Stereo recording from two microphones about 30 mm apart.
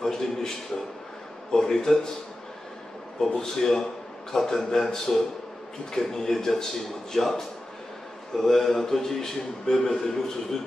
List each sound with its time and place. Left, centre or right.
0.0 s a sound: centre
1.5 s speech: centre
3.2 s a man's voice: centre